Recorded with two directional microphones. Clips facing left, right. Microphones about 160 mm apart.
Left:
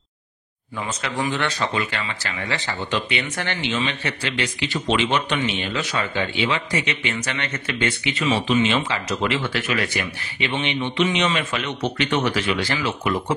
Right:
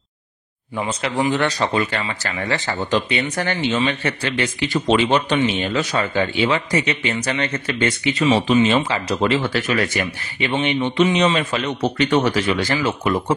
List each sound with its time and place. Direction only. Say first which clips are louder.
0.7 s speech: right 5 dB; 30° right (ahead or behind); by 11.1 s 45° right (ahead or behind)
11.1 s speech: right 4 dB; 30° right (ahead or behind)